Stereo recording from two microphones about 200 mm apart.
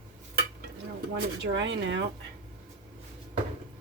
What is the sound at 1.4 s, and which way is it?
Speech, 65° right (ahead or behind).